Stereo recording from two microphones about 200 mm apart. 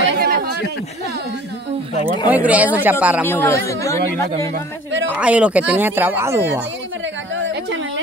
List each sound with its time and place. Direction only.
0.2 s a sound: 50° right (ahead or behind)
2.2 s speech: 5° right (ahead or behind)
3.3 s a man's voice: 10° left (ahead or behind)
5.1 s speech: 5° right (ahead or behind)